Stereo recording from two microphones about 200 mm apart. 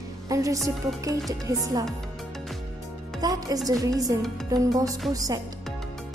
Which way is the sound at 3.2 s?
20° right (ahead or behind).